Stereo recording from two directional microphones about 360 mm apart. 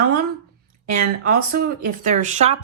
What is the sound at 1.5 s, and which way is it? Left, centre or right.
Speech, right.